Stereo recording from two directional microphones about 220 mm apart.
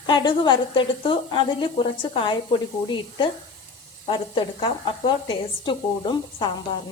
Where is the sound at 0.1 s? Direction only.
20° left (ahead or behind).